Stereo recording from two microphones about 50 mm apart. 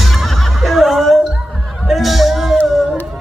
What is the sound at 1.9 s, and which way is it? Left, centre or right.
Music, centre.